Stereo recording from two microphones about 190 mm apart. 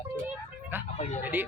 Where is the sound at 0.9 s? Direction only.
40° left (ahead or behind).